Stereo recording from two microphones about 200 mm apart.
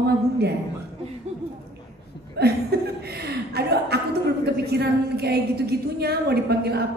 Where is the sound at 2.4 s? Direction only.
55° right (ahead or behind).